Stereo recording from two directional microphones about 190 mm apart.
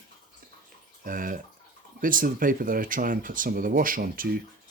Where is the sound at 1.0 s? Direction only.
45° right (ahead or behind).